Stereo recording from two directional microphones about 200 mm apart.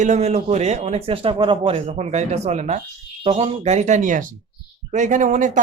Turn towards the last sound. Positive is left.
turn(degrees=-40)  # may be behind; listen again after turning